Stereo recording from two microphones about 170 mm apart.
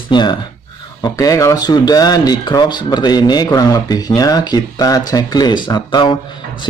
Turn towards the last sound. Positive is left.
turn(degrees=30)  # may be behind; listen again after turning